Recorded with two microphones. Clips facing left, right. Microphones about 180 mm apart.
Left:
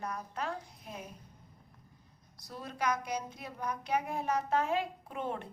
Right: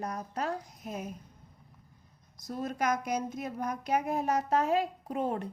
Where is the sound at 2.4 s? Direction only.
45° right (ahead or behind).